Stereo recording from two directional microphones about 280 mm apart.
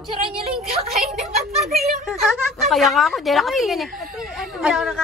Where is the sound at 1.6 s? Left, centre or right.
Centre.